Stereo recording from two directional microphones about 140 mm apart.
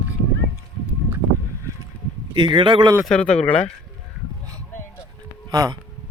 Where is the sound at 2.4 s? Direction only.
35° right (ahead or behind).